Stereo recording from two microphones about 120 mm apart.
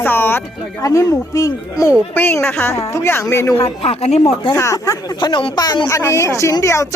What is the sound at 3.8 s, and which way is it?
Speech, 60° left (ahead or behind).